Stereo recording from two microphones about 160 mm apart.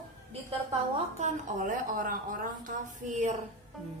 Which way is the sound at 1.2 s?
55° right (ahead or behind).